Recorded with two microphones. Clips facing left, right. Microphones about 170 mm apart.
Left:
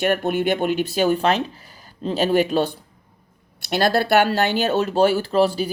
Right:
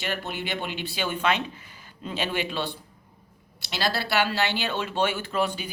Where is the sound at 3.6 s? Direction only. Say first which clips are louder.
Left 9 dB; 55° left (ahead or behind).